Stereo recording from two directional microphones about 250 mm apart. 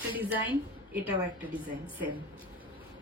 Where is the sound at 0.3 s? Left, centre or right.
Centre.